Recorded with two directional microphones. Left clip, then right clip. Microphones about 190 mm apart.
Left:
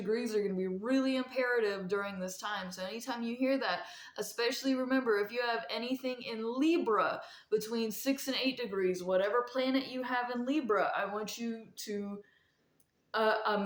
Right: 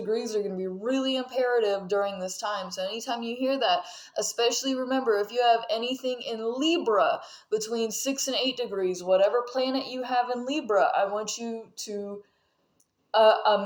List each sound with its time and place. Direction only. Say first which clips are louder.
0.1 s a woman's voice: right 4 dB; 20° left (ahead or behind)
13.1 s a woman's voice: right 11 dB; 15° left (ahead or behind)